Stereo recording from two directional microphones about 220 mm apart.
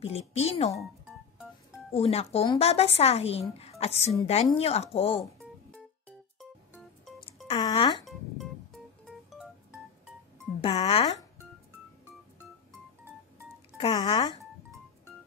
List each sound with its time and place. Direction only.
0.0 s a woman's voice: 30° left (ahead or behind)
2.0 s a woman's voice: 25° left (ahead or behind)
7.4 s speech: 20° left (ahead or behind)
8.0 s music: centre (ahead or behind)
10.6 s a woman's voice: 25° left (ahead or behind)
13.7 s a woman's voice: 25° left (ahead or behind)